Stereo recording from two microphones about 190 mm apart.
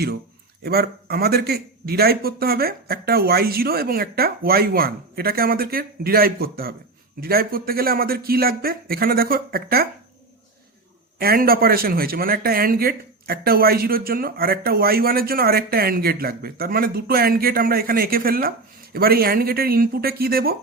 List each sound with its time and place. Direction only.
0.6 s speech: 55° right (ahead or behind)
11.2 s speech: 50° right (ahead or behind)